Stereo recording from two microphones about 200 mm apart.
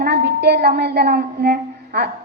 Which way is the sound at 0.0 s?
55° right (ahead or behind).